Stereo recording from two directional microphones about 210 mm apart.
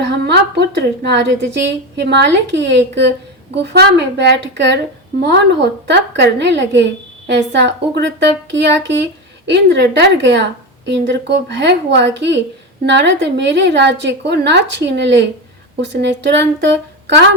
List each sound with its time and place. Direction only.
0.5 s a woman's voice: 55° right (ahead or behind)